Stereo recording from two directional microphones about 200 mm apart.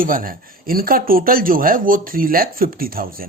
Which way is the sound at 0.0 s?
45° right (ahead or behind).